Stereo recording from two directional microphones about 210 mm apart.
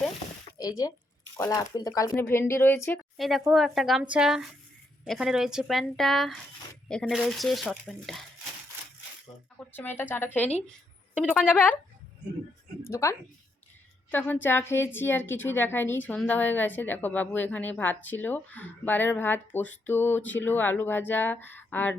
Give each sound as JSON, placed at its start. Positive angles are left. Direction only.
{"t": 0.6, "sound": "a woman's voice", "side_deg": 15}
{"t": 3.2, "sound": "speech", "side_deg": 0}
{"t": 9.7, "sound": "a woman's voice", "side_deg": 10}
{"t": 11.1, "sound": "speech", "side_deg": -5}
{"t": 11.5, "sound": "a woman's voice", "side_deg": 10}
{"t": 12.8, "sound": "a woman's voice", "side_deg": 15}